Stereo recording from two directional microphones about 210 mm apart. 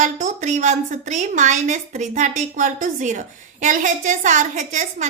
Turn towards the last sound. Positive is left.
turn(degrees=-35)  # may be behind; listen again after turning